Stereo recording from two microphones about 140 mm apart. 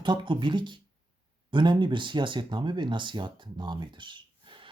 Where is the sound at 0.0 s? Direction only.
35° right (ahead or behind).